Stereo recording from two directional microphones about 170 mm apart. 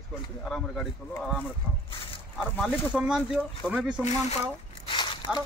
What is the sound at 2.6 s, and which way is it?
Speech, 5° right (ahead or behind).